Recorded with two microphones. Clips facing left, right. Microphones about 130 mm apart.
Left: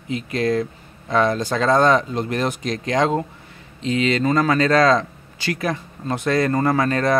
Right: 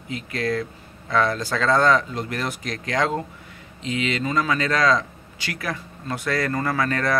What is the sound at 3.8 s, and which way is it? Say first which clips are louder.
Speech: left 6 dB; 35° left (ahead or behind).